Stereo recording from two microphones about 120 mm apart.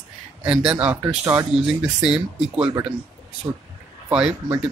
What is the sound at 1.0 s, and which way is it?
Speech, 25° right (ahead or behind).